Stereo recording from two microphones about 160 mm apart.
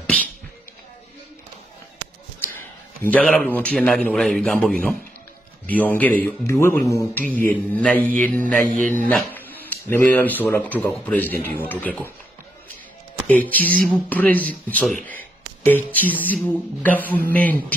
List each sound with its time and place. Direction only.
3.0 s speech: 10° left (ahead or behind)
8.6 s music: 55° right (ahead or behind)
9.1 s speech: 10° left (ahead or behind)
13.3 s speech: 10° left (ahead or behind)